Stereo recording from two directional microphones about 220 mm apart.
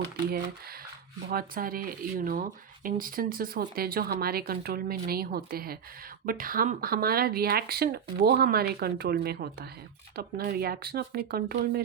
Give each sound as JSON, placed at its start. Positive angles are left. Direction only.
{"t": 0.3, "sound": "speech", "side_deg": -45}